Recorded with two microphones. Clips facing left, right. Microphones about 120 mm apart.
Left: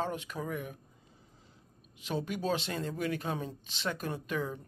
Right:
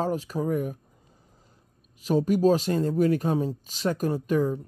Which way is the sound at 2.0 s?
40° right (ahead or behind).